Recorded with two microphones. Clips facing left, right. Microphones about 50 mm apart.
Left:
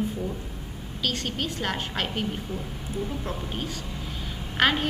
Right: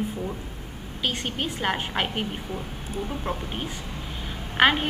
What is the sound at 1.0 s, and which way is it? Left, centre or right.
A woman's voice, centre.